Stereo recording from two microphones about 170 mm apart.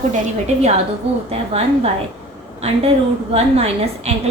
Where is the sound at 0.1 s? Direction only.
40° right (ahead or behind).